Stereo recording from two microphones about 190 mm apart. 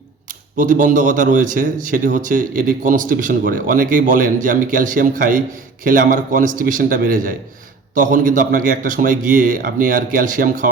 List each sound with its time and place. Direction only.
0.3 s a man's voice: 45° right (ahead or behind)